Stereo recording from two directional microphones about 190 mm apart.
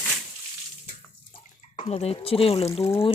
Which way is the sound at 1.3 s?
30° left (ahead or behind).